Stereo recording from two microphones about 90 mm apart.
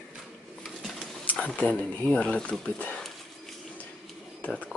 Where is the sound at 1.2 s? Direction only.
15° left (ahead or behind).